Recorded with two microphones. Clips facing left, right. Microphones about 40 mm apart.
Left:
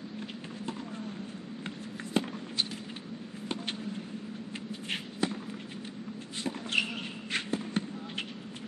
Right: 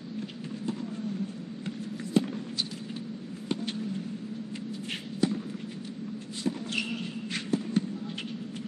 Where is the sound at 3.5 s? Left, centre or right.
Centre.